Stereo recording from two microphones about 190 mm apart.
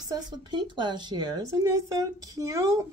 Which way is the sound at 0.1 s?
25° right (ahead or behind).